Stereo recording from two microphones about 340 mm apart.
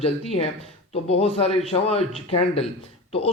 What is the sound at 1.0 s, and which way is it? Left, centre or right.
Speech, centre.